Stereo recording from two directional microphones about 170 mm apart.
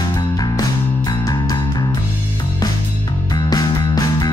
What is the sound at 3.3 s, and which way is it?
Music, 20° left (ahead or behind).